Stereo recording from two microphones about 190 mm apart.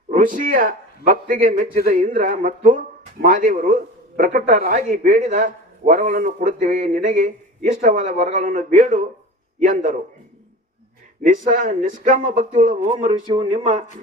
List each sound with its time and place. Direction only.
0.1 s a man's voice: 45° right (ahead or behind)
11.2 s speech: 40° right (ahead or behind)